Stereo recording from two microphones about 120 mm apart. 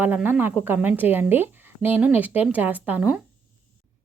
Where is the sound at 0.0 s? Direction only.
15° right (ahead or behind).